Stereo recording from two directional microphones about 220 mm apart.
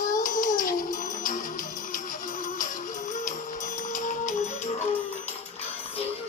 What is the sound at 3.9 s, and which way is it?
Music, 35° left (ahead or behind).